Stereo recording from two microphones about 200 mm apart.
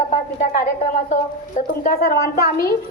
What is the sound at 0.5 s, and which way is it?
Speech, 40° left (ahead or behind).